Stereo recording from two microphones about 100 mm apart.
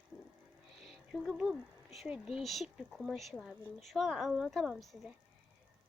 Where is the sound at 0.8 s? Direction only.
Centre (ahead or behind).